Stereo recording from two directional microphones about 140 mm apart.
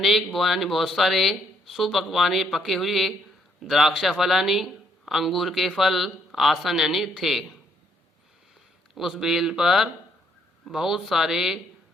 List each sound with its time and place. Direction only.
0.0 s speech: centre (ahead or behind)
9.0 s speech: centre (ahead or behind)